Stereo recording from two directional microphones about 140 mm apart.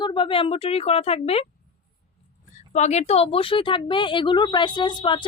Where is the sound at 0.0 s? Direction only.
35° left (ahead or behind).